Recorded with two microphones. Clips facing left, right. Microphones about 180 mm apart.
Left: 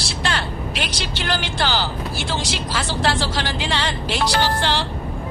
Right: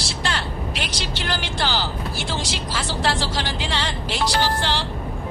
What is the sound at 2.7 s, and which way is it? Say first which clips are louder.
Music: left 2 dB; 65° left (ahead or behind).